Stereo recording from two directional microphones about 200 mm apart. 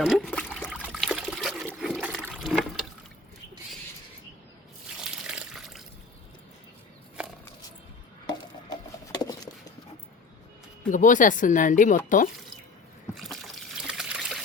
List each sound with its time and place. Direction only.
0.0 s trickle: centre (ahead or behind)
4.9 s water: 5° right (ahead or behind)
8.3 s patter: 20° left (ahead or behind)
10.8 s speech: 40° left (ahead or behind)
13.1 s trickle: centre (ahead or behind)